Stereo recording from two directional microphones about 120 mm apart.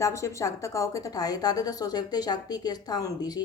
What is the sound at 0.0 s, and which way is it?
A woman's voice, 25° left (ahead or behind).